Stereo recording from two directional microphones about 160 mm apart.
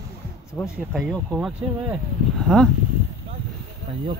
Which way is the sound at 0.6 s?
10° left (ahead or behind).